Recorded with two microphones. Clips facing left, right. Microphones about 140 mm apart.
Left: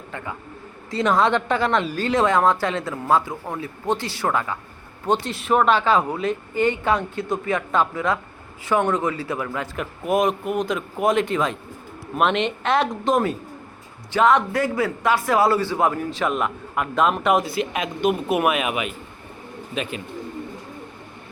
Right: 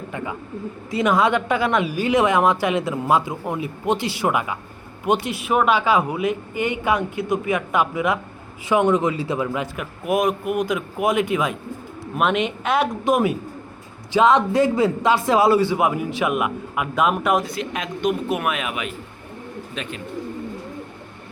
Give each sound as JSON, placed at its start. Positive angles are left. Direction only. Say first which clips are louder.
{"t": 0.9, "sound": "a man's voice", "louder": "right 1 dB", "side_deg": -10}
{"t": 9.7, "sound": "a man's voice", "louder": "left 3 dB", "side_deg": -5}